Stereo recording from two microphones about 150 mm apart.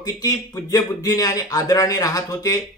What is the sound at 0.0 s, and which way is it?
Speech, 25° left (ahead or behind).